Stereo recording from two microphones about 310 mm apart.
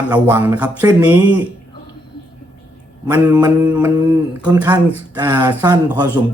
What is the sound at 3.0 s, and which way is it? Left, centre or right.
Speech, centre.